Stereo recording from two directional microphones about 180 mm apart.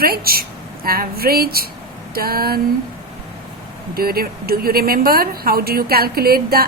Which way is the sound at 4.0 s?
55° right (ahead or behind).